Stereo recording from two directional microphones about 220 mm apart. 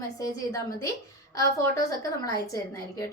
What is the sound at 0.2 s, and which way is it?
Speech, 15° left (ahead or behind).